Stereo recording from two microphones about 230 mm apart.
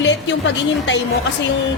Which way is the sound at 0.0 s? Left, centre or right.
Left.